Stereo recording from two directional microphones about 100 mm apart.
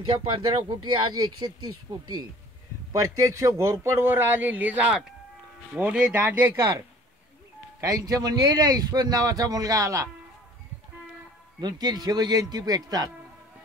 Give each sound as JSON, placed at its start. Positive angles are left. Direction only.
{"t": 0.0, "sound": "speech", "side_deg": -60}
{"t": 2.9, "sound": "a man's voice", "side_deg": -30}
{"t": 7.8, "sound": "speech", "side_deg": -35}
{"t": 11.6, "sound": "speech", "side_deg": -45}